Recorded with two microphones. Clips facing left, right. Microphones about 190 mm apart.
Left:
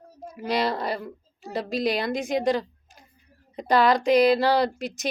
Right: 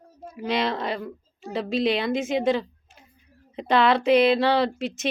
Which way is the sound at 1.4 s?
40° left (ahead or behind).